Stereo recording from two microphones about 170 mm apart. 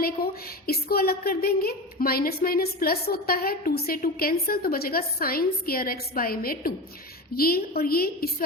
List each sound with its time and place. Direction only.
0.2 s a woman's voice: 65° left (ahead or behind)